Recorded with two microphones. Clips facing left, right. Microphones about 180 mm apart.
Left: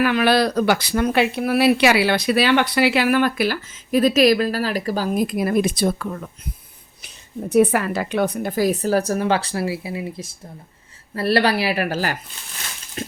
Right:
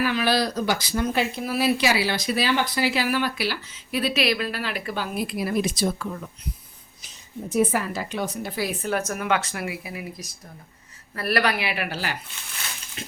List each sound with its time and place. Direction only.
0.0 s speech: 60° left (ahead or behind)
7.5 s a woman's voice: 65° left (ahead or behind); by 12.1 s 45° left (ahead or behind)
13.0 s a sound: 45° left (ahead or behind)